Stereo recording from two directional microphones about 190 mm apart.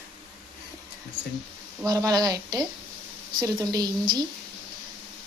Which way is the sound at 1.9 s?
20° right (ahead or behind).